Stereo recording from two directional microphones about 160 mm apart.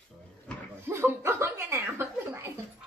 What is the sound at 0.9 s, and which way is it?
A woman's voice, 15° right (ahead or behind).